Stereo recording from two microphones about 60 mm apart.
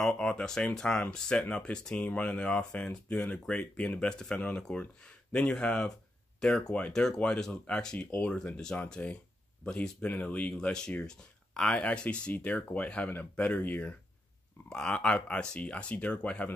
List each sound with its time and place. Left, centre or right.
0.2 s speech: centre
8.3 s speech: centre
9.0 s speech: left; by 11.8 s centre
11.8 s speech: centre
14.7 s speech: centre